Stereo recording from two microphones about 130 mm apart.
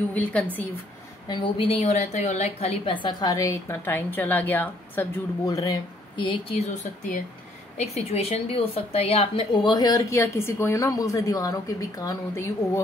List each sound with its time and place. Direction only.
0.1 s a woman's voice: 10° left (ahead or behind)
1.3 s a woman's voice: 40° left (ahead or behind); by 5.0 s 15° left (ahead or behind)
5.4 s speech: 25° left (ahead or behind)
6.2 s a woman's voice: 45° left (ahead or behind); by 12.8 s 25° left (ahead or behind)